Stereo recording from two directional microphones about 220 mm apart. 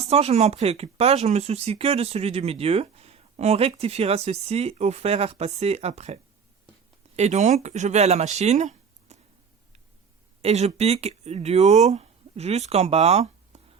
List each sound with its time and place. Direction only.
0.1 s speech: 30° right (ahead or behind)
7.2 s speech: 30° right (ahead or behind)
10.4 s speech: 30° right (ahead or behind)